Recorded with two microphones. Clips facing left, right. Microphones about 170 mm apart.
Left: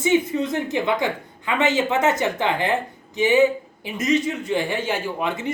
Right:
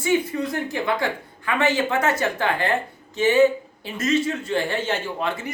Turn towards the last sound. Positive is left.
turn(degrees=20)  # may be behind; listen again after turning